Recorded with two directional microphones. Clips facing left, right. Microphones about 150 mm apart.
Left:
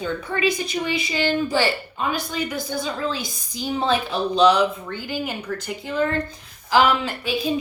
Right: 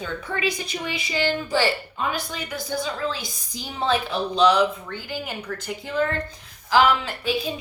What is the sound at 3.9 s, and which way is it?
A woman's voice, 15° left (ahead or behind).